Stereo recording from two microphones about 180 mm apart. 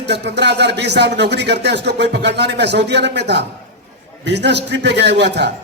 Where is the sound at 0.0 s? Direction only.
70° right (ahead or behind).